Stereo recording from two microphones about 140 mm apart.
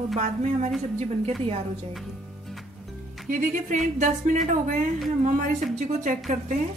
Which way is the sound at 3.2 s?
65° right (ahead or behind).